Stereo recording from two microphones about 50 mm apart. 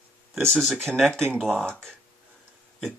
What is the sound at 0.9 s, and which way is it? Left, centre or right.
Speech, centre.